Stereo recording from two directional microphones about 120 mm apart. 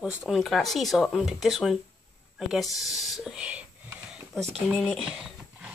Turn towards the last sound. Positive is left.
turn(degrees=-5)  # may be behind; listen again after turning